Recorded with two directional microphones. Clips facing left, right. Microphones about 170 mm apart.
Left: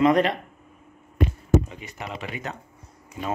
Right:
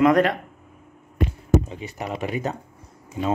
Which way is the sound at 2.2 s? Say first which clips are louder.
Right 9 dB; 40° right (ahead or behind).